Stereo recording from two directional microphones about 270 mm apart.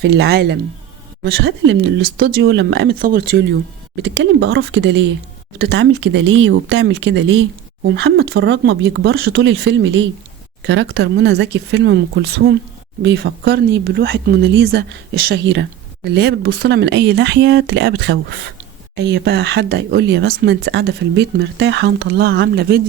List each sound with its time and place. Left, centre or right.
0.0 s speech: right